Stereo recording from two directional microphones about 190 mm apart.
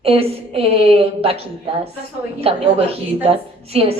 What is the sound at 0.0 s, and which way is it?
A woman's voice, 30° right (ahead or behind).